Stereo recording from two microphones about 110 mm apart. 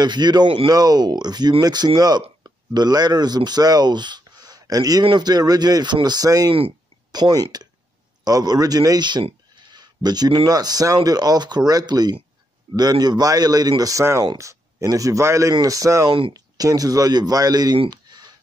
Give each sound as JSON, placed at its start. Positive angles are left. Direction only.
{"t": 0.0, "sound": "speech", "side_deg": -40}
{"t": 0.7, "sound": "speech", "side_deg": -35}
{"t": 16.1, "sound": "speech", "side_deg": -50}
{"t": 16.3, "sound": "speech", "side_deg": -35}
{"t": 17.8, "sound": "a sound", "side_deg": -40}